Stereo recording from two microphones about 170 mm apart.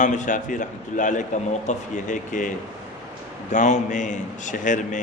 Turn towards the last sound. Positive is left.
turn(degrees=50)  # may be behind; listen again after turning